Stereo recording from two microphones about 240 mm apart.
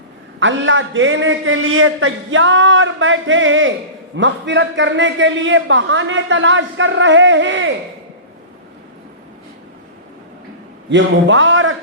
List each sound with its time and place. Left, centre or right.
0.3 s a man's voice: right
10.8 s a man's voice: right